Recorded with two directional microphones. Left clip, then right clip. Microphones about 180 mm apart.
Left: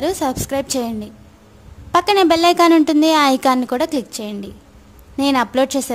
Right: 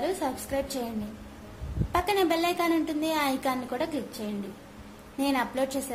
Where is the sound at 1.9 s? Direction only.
50° left (ahead or behind).